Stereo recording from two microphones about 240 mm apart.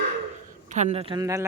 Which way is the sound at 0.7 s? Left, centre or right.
Right.